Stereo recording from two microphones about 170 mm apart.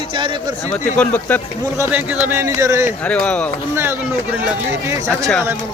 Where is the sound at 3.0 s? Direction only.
5° left (ahead or behind).